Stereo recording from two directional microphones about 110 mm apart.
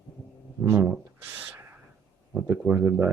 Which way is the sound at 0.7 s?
20° right (ahead or behind).